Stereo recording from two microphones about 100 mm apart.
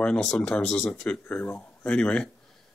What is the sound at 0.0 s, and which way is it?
Speech, 10° left (ahead or behind).